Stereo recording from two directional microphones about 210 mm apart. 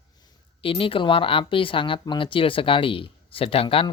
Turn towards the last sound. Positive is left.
turn(degrees=25)  # may be behind; listen again after turning